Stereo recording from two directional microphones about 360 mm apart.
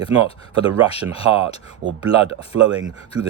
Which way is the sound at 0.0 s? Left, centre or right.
Centre.